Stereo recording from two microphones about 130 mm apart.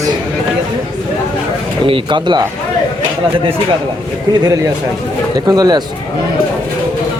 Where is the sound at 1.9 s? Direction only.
40° right (ahead or behind).